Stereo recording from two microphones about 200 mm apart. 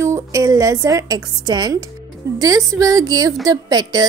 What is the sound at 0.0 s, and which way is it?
A woman's voice, 15° right (ahead or behind).